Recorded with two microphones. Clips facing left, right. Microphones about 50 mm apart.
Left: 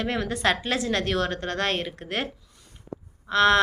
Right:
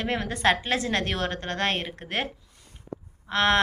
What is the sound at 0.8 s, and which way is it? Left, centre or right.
Speech, right.